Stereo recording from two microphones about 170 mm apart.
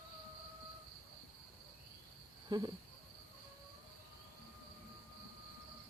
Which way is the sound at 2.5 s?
25° right (ahead or behind).